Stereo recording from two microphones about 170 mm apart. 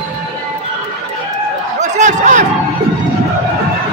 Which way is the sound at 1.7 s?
45° right (ahead or behind).